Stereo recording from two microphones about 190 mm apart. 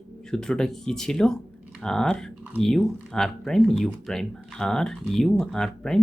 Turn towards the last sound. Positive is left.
turn(degrees=5)  # may be behind; listen again after turning